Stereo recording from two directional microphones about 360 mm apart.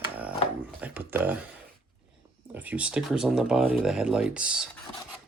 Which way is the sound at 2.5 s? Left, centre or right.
Centre.